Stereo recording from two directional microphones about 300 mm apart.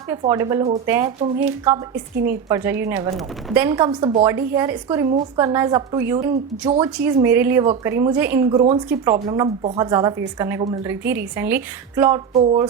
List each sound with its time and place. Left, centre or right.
0.2 s speech: centre
12.3 s speech: right